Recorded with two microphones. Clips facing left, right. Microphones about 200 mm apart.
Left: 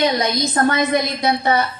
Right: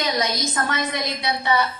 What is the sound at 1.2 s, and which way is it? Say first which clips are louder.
Speech: left 5 dB; 45° left (ahead or behind).